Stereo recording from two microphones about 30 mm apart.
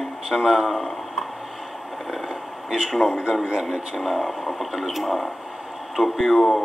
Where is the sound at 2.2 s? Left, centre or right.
Right.